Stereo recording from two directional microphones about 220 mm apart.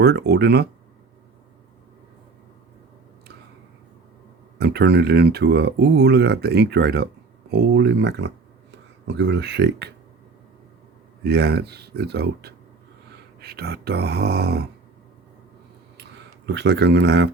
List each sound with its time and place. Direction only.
0.0 s speech: 45° right (ahead or behind)
4.5 s speech: 45° right (ahead or behind)
11.2 s speech: 45° right (ahead or behind)
16.0 s a sound: 50° right (ahead or behind)